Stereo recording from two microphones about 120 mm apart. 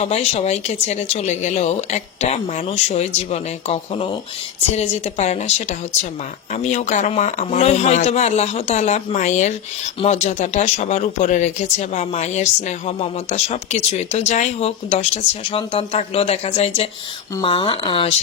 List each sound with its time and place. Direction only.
0.0 s speech: 60° left (ahead or behind); by 9.6 s 85° left
10.0 s speech: 65° left (ahead or behind)
17.4 s speech: 45° left (ahead or behind)